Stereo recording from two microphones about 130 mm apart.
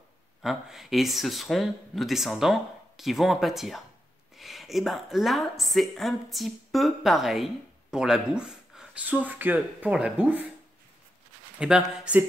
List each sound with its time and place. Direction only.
0.4 s a woman's voice: centre (ahead or behind)
11.6 s speech: 5° right (ahead or behind)